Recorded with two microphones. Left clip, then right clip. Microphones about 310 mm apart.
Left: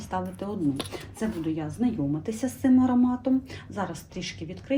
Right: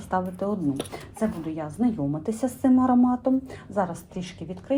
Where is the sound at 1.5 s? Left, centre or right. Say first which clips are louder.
Right 2 dB; centre.